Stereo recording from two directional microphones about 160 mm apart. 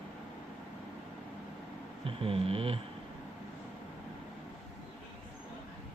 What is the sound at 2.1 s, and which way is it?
Speech, 35° right (ahead or behind).